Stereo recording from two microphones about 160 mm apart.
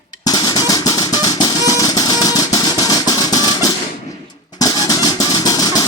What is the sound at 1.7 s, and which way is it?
Music, 25° left (ahead or behind).